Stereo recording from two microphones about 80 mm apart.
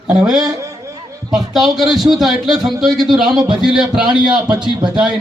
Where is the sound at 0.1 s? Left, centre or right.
Centre.